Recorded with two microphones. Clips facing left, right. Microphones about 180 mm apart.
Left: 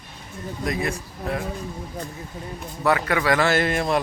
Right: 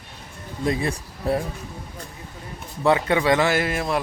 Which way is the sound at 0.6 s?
30° right (ahead or behind).